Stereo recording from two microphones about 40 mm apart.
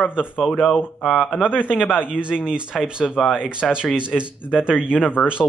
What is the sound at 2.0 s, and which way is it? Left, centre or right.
Speech, right.